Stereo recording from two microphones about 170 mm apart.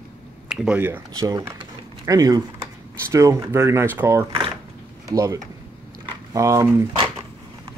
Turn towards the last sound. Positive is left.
turn(degrees=-15)  # may be behind; listen again after turning